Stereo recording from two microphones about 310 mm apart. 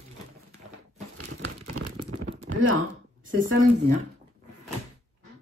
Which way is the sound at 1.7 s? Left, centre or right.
Right.